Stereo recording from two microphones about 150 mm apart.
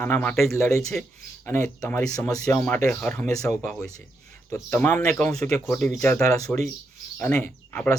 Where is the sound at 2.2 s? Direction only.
25° left (ahead or behind).